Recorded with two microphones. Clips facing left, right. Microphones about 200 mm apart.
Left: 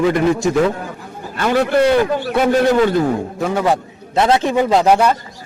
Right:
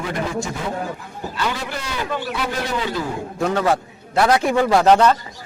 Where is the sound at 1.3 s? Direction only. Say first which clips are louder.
Left 12 dB; 55° left (ahead or behind).